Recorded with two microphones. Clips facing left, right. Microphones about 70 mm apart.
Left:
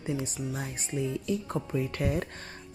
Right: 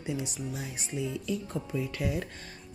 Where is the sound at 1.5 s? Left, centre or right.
Left.